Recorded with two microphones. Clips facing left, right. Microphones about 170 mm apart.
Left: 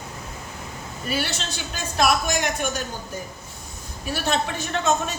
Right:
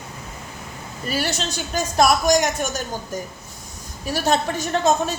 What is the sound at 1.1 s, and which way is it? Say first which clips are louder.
A woman's voice: right 3 dB; 40° right (ahead or behind).